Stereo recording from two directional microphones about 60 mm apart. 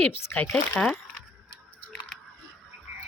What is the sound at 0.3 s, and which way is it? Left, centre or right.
Speech, left.